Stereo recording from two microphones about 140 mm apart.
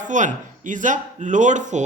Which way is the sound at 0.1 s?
65° right (ahead or behind).